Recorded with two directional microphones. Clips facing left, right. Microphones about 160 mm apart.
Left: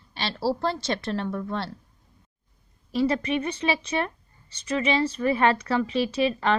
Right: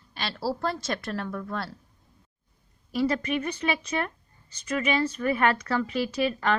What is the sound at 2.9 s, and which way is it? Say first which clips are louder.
Speech: left 2 dB; 25° left (ahead or behind).